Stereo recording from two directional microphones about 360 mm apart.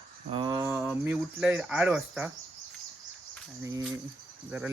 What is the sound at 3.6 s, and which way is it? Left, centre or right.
Speech, centre.